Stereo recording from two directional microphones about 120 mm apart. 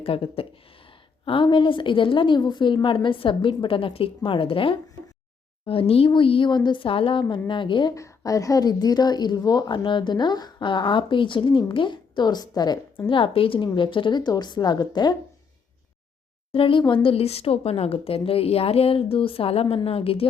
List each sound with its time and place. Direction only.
0.0 s a woman's voice: 50° left (ahead or behind)
7.9 s a woman's voice: 25° left (ahead or behind)
13.1 s a woman's voice: 45° left (ahead or behind)
16.5 s a woman's voice: 50° left (ahead or behind)